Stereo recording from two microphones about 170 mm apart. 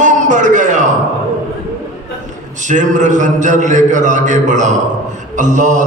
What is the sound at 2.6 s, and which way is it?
A man's voice, 45° right (ahead or behind).